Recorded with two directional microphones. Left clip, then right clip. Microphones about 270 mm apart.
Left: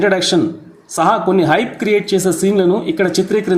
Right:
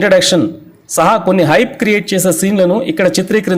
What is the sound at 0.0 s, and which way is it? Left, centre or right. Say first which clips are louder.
A woman's voice: right 4 dB; right.